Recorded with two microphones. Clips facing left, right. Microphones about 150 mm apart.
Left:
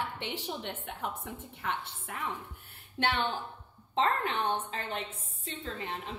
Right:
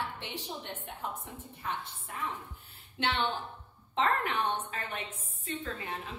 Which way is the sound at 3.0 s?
50° left (ahead or behind).